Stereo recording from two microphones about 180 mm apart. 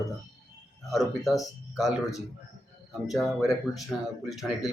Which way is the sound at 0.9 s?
Centre (ahead or behind).